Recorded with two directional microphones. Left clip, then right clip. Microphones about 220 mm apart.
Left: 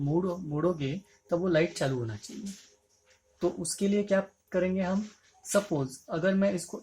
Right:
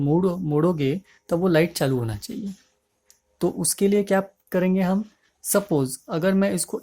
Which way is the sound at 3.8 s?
50° right (ahead or behind).